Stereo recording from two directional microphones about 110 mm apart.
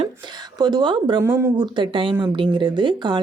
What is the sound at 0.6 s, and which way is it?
Speech, 45° right (ahead or behind).